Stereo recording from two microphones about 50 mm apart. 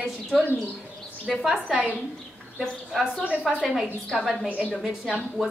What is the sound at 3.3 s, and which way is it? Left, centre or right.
Speech, right.